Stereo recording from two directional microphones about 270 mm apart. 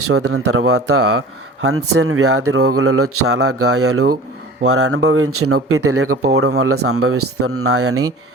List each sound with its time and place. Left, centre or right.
0.0 s speech: right